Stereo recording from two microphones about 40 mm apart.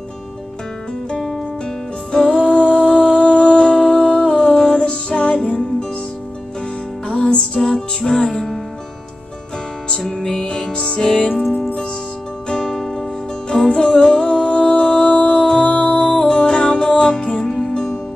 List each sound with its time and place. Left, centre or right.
2.1 s music: left
7.2 s music: left
9.8 s music: centre
10.4 s music: left
12.4 s music: centre
17.5 s music: centre